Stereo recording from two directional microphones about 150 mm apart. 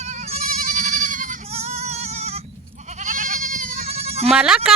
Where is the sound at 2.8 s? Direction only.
55° right (ahead or behind).